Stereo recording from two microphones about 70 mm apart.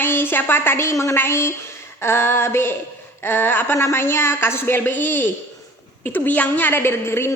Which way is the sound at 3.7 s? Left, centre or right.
Left.